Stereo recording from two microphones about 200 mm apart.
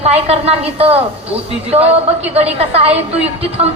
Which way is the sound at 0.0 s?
30° right (ahead or behind).